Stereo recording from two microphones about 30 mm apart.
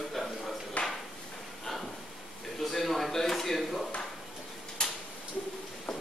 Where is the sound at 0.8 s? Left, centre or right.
Left.